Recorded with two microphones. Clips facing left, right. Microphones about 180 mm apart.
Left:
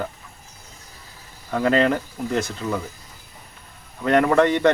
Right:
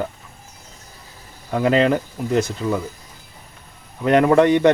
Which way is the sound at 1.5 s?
15° right (ahead or behind).